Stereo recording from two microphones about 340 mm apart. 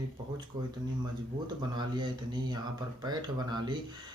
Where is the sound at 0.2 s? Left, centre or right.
Centre.